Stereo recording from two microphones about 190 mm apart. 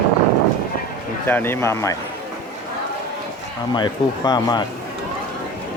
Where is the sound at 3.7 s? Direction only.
20° left (ahead or behind).